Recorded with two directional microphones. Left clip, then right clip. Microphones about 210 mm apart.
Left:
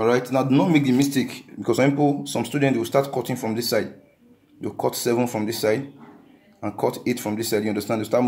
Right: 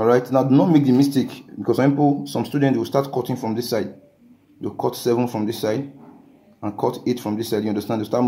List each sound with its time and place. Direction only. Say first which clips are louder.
0.3 s speech: right 3 dB; 5° right (ahead or behind)